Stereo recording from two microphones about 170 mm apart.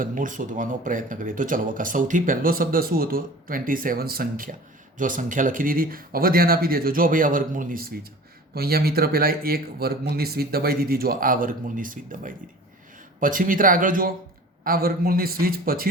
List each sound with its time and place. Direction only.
0.0 s speech: 50° right (ahead or behind)